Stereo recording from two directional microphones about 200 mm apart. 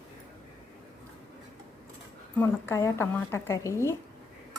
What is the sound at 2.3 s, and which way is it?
Speech, 10° left (ahead or behind).